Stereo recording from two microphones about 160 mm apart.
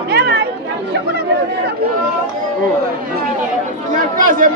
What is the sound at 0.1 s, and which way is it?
Chatter, 90° right.